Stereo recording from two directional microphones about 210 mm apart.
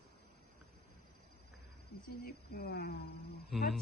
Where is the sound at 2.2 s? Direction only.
45° left (ahead or behind).